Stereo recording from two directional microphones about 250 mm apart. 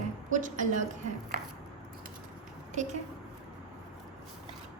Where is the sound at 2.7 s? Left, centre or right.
Right.